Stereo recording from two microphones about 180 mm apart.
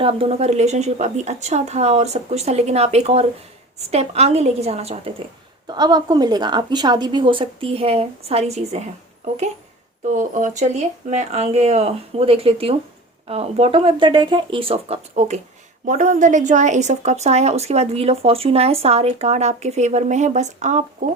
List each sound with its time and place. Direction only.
0.0 s a woman's voice: 30° right (ahead or behind)
5.6 s a woman's voice: 25° right (ahead or behind)
10.1 s a woman's voice: 45° right (ahead or behind)